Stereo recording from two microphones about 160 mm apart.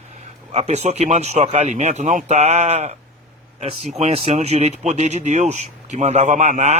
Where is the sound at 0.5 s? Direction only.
45° right (ahead or behind).